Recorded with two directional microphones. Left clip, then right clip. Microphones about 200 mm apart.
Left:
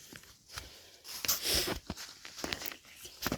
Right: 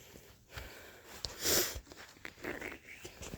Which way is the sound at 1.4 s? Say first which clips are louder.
Right 2 dB; 40° right (ahead or behind).